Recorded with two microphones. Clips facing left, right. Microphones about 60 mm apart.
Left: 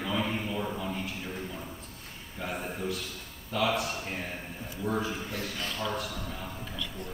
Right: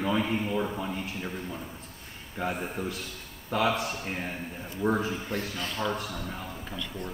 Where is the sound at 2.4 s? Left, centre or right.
Right.